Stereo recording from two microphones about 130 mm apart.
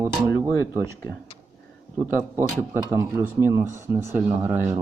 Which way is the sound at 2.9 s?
20° right (ahead or behind).